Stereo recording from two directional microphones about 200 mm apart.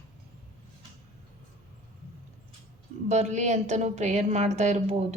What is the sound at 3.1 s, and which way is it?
A woman's voice, 35° right (ahead or behind).